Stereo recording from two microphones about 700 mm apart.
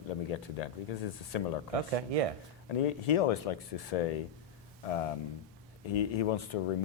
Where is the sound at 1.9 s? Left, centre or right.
Right.